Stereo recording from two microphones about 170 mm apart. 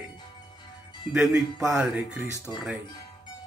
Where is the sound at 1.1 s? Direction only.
5° right (ahead or behind).